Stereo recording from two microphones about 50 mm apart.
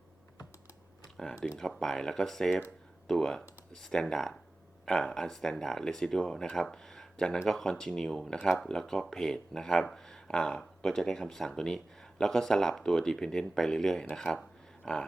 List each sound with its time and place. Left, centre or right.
1.0 s computer keyboard: centre
1.5 s speech: centre
14.8 s speech: centre